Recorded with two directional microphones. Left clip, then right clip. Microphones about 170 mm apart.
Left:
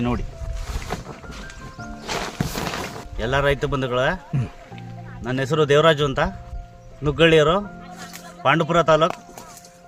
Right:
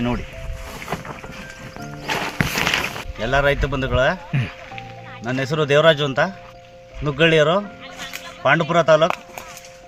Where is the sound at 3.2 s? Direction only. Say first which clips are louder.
Right 2 dB; 40° left (ahead or behind).